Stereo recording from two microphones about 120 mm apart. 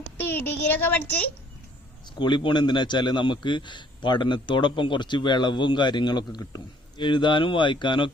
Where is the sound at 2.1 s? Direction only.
40° left (ahead or behind).